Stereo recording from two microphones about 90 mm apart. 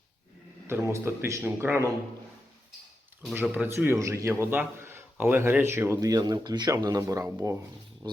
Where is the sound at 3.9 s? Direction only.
35° right (ahead or behind).